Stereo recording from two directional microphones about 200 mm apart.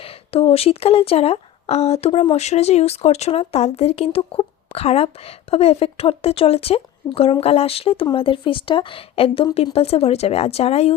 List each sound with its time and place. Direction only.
0.0 s speech: 30° left (ahead or behind)